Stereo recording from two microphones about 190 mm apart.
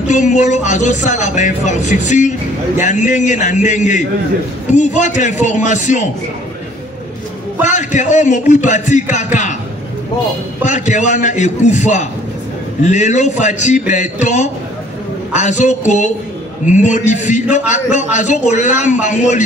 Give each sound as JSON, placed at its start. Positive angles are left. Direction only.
{"t": 0.1, "sound": "a man's voice", "side_deg": 40}
{"t": 7.6, "sound": "a man's voice", "side_deg": 40}
{"t": 10.6, "sound": "a man's voice", "side_deg": 40}